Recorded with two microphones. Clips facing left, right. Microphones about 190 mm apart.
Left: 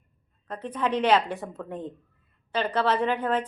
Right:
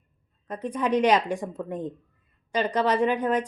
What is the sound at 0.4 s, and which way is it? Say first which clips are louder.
A woman's voice: right 2 dB; 10° right (ahead or behind).